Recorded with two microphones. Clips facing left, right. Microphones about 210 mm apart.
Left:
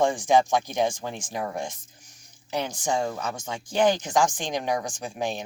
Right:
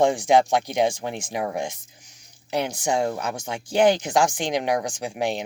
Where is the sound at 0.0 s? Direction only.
65° right (ahead or behind).